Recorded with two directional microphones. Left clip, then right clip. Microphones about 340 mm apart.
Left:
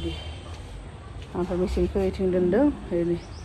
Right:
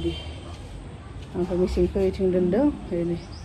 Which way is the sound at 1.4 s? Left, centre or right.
Left.